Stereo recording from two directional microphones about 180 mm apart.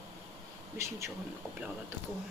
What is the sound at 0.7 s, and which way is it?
Speech, 15° right (ahead or behind).